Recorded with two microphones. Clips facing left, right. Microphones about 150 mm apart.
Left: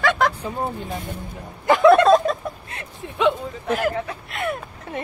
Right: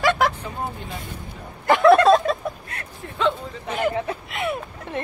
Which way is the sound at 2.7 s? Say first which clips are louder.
Left 1 dB; 20° left (ahead or behind).